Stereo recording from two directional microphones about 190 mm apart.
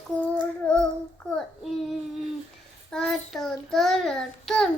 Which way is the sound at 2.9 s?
Centre (ahead or behind).